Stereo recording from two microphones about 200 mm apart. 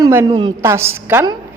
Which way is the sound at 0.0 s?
15° right (ahead or behind).